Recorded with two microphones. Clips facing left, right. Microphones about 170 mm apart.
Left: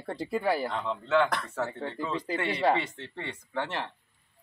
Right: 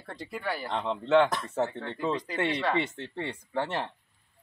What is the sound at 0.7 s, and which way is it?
Speech, 25° right (ahead or behind).